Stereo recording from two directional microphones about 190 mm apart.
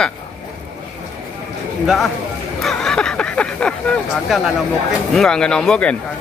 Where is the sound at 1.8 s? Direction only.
Centre (ahead or behind).